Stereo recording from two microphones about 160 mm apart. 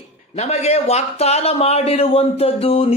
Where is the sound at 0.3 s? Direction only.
40° left (ahead or behind).